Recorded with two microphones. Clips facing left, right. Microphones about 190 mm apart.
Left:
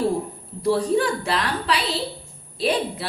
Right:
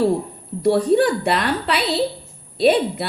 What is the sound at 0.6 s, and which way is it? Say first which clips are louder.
A woman's voice: right 5 dB; 60° right (ahead or behind).